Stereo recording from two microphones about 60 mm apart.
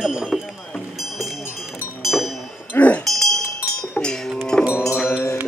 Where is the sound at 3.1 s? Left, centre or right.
Centre.